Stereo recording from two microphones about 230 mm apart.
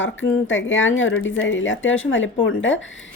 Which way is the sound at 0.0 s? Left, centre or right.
Left.